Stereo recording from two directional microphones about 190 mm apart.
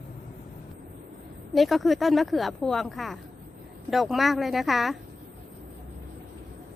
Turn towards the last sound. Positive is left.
turn(degrees=0)  # may be behind; listen again after turning